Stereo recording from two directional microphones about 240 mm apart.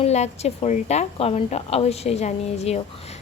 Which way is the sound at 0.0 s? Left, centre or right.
Left.